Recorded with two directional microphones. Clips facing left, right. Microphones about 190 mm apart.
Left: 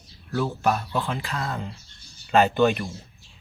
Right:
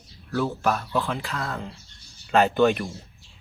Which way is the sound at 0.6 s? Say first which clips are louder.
Even; centre (ahead or behind).